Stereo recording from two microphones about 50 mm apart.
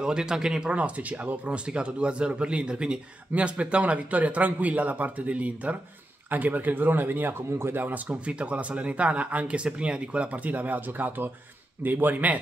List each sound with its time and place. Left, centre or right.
0.0 s a man's voice: centre; by 7.8 s right
7.8 s a man's voice: right